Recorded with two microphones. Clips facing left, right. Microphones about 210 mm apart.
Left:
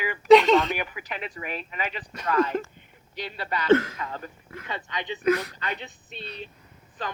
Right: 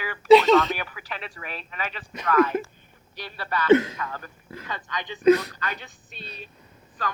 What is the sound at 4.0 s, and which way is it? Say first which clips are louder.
A woman's voice: even; 20° left (ahead or behind).